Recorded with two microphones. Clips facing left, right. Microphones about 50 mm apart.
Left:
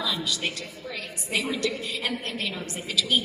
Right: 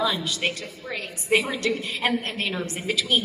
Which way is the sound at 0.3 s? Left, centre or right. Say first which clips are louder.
Right 3 dB; right.